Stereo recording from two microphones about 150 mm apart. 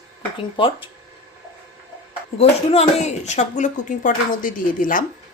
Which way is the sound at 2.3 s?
45° left (ahead or behind).